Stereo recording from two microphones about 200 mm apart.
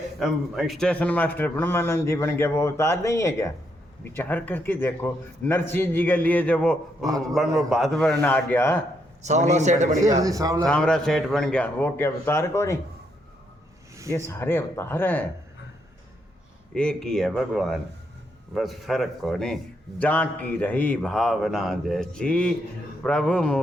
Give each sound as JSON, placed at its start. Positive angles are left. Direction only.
{"t": 0.2, "sound": "a man's voice", "side_deg": 0}
{"t": 9.2, "sound": "a man's voice", "side_deg": -35}
{"t": 10.2, "sound": "speech", "side_deg": -15}
{"t": 10.7, "sound": "speech", "side_deg": 5}
{"t": 14.1, "sound": "a man's voice", "side_deg": 15}
{"t": 16.7, "sound": "speech", "side_deg": 5}